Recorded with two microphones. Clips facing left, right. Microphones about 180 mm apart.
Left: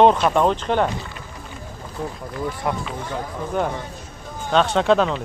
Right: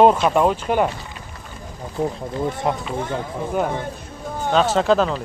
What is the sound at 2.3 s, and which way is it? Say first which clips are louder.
Speech: right 3 dB; 25° right (ahead or behind).